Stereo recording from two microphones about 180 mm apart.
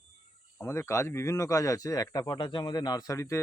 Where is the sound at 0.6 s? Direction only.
15° left (ahead or behind).